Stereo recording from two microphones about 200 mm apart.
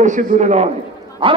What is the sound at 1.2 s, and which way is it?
Speech, 25° right (ahead or behind).